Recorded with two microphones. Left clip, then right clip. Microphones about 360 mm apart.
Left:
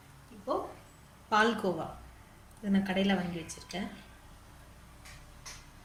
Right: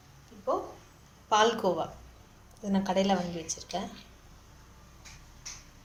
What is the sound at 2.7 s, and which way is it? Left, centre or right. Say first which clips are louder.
Speech: right 4 dB; centre.